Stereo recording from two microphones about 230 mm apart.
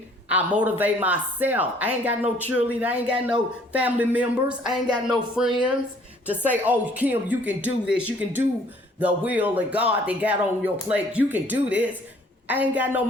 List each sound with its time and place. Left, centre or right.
0.3 s speech: centre